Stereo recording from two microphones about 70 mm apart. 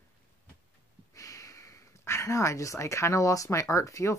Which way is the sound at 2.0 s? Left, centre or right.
Left.